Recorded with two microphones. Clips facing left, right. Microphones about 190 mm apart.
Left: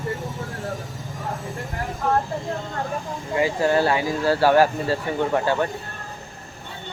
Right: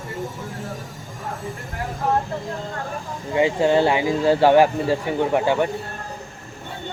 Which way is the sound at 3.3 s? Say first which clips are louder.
Right 3 dB; 20° right (ahead or behind).